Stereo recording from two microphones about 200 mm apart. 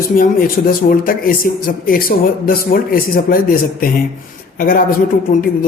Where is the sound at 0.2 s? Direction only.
45° left (ahead or behind).